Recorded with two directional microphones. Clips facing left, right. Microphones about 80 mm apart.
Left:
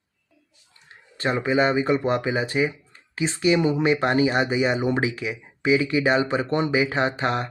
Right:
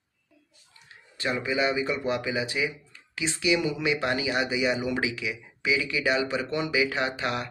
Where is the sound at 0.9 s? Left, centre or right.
Left.